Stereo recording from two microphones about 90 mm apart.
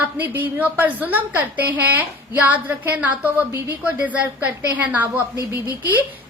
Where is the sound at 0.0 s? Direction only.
20° right (ahead or behind).